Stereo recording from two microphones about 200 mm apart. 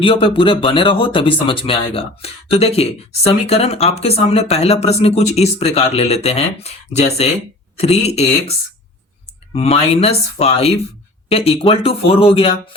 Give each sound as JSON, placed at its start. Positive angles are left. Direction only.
{"t": 0.0, "sound": "speech", "side_deg": 25}